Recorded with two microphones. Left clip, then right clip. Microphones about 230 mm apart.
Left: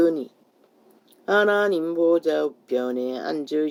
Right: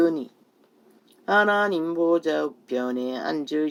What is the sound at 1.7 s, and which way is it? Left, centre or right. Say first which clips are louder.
Speech: left 2 dB; right.